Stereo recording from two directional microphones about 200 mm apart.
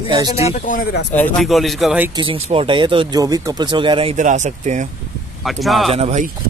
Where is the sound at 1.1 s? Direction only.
5° left (ahead or behind).